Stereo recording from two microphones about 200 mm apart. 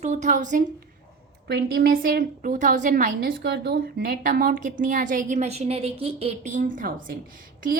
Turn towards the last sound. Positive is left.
turn(degrees=-45)  # may be behind; listen again after turning